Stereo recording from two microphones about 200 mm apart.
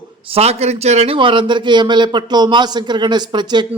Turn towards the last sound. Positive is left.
turn(degrees=-20)  # may be behind; listen again after turning